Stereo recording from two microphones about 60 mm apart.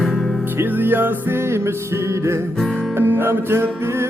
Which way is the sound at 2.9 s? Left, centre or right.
Right.